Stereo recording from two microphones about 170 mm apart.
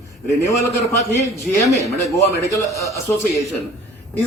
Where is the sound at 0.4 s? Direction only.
15° left (ahead or behind).